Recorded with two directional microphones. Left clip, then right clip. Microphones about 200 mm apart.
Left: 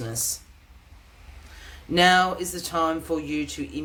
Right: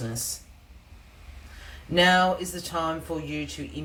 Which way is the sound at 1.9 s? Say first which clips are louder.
Left 2 dB; 50° left (ahead or behind).